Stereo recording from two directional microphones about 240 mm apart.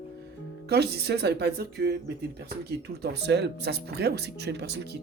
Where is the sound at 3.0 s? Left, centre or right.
Right.